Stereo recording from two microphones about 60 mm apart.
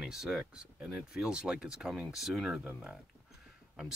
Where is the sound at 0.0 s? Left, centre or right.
Centre.